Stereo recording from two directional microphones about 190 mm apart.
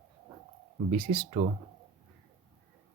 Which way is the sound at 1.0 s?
30° right (ahead or behind).